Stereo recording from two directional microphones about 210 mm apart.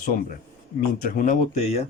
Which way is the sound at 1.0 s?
40° left (ahead or behind).